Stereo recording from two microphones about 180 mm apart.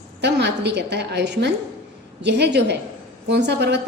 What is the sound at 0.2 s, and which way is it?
A woman's voice, 70° right (ahead or behind).